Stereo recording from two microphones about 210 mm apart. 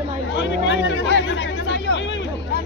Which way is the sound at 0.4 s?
60° left (ahead or behind).